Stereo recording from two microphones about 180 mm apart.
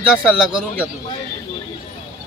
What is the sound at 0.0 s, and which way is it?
Speech, 5° right (ahead or behind).